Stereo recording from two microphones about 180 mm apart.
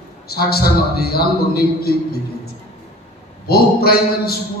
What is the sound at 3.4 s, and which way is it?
Speech, 60° left (ahead or behind).